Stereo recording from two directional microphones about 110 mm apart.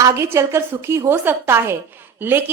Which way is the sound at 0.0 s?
25° right (ahead or behind).